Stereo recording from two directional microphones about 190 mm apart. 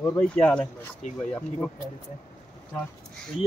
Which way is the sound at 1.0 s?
40° left (ahead or behind).